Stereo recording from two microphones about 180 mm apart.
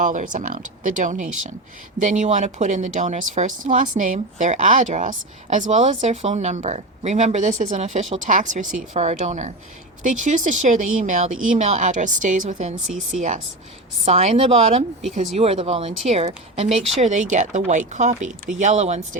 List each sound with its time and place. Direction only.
0.0 s a woman's voice: 45° right (ahead or behind)